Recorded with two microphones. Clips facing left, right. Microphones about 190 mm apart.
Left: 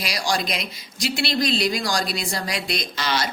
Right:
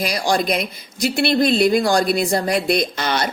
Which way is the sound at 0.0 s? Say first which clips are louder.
Right 6 dB; 50° right (ahead or behind).